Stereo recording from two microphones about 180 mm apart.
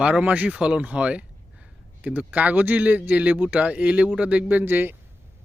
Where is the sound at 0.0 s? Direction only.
10° right (ahead or behind).